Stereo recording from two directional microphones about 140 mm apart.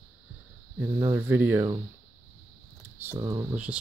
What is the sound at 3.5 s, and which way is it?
Speech, 10° right (ahead or behind).